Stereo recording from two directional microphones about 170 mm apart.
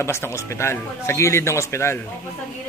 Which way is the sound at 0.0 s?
15° left (ahead or behind).